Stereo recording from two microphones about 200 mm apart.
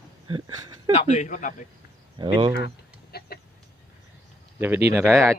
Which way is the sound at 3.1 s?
50° left (ahead or behind).